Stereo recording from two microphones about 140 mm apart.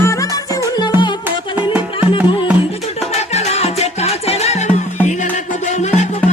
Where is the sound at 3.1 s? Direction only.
50° left (ahead or behind).